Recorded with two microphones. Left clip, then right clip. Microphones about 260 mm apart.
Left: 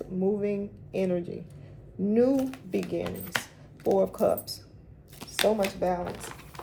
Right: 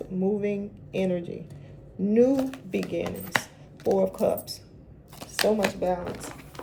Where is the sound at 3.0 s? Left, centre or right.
Centre.